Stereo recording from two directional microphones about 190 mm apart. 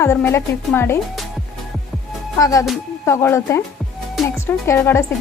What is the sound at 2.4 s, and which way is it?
Speech, 15° left (ahead or behind).